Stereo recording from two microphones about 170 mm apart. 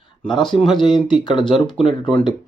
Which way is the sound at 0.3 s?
25° left (ahead or behind).